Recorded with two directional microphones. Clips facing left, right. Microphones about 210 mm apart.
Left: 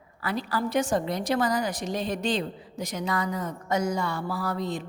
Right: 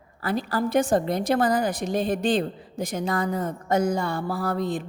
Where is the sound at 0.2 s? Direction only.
50° right (ahead or behind).